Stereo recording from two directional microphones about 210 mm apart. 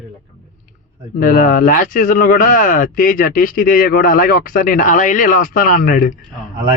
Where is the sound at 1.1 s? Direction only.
40° left (ahead or behind).